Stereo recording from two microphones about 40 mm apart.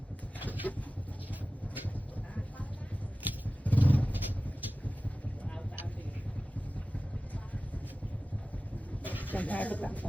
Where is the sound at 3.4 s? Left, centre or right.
Left.